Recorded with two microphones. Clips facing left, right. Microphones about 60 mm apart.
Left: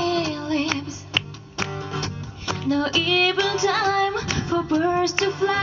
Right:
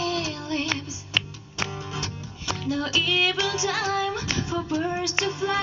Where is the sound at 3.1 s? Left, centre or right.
Left.